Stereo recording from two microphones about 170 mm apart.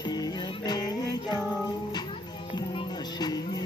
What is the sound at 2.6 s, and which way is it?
Music, 25° left (ahead or behind).